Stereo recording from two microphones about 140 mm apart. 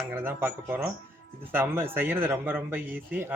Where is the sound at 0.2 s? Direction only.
15° right (ahead or behind).